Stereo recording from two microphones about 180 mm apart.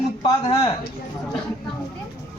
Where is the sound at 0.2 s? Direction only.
20° left (ahead or behind).